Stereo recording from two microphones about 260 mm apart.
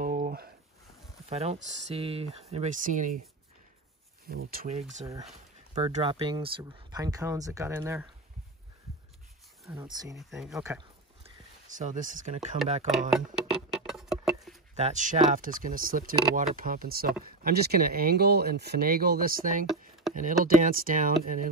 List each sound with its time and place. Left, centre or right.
0.0 s a sound: right
1.3 s speech: right
4.5 s speech: right; by 8.1 s centre
9.7 s speech: centre
10.3 s speech: centre
11.6 s speech: right
13.1 s music: centre
14.8 s speech: right